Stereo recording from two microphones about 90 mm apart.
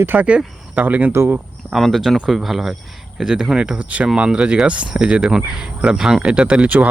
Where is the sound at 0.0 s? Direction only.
20° right (ahead or behind).